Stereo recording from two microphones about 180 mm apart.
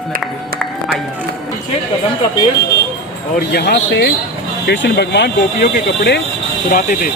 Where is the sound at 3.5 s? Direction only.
65° left (ahead or behind).